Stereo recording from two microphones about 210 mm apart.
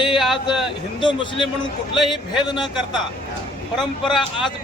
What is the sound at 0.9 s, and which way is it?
Speech, 25° left (ahead or behind).